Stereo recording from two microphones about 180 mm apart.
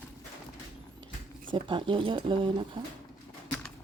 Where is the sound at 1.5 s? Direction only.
30° right (ahead or behind).